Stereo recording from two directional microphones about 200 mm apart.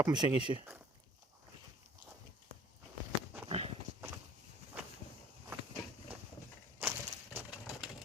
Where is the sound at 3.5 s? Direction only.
30° right (ahead or behind).